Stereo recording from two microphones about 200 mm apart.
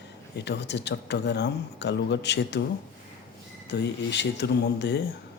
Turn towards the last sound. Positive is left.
turn(degrees=60)  # may be behind; listen again after turning